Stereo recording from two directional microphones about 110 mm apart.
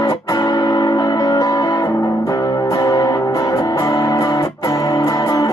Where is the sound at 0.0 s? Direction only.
30° left (ahead or behind).